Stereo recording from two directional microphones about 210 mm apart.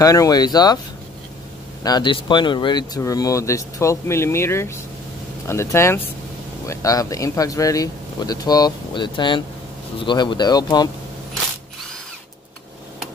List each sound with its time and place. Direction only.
0.0 s speech: 15° left (ahead or behind)
1.8 s speech: 20° left (ahead or behind)